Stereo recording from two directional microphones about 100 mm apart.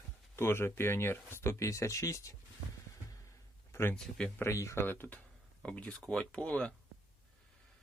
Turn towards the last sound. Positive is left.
turn(degrees=10)  # may be behind; listen again after turning